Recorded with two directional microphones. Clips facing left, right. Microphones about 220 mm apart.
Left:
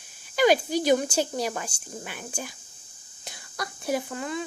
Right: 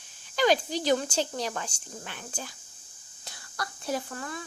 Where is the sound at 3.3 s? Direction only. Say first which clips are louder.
Left 2 dB; 15° left (ahead or behind).